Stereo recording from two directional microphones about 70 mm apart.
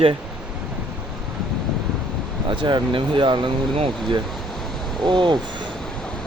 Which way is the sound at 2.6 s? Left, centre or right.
Right.